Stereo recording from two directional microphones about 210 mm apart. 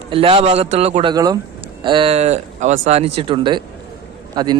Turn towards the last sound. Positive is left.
turn(degrees=-20)  # may be behind; listen again after turning